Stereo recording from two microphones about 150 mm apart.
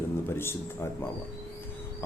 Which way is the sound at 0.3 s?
15° left (ahead or behind).